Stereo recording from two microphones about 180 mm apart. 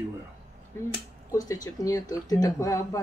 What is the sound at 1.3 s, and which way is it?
Speech, 20° left (ahead or behind).